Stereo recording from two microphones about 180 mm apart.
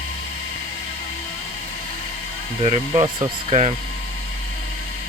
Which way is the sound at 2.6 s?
35° right (ahead or behind).